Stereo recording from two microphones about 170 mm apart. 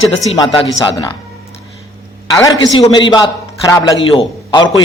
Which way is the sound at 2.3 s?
20° left (ahead or behind).